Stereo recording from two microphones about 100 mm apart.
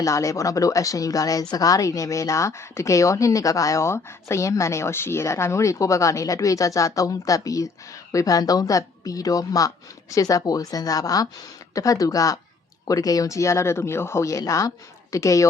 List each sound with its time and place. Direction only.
0.0 s speech: 30° left (ahead or behind)